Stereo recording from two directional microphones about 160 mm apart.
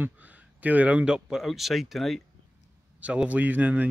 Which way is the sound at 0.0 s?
10° right (ahead or behind).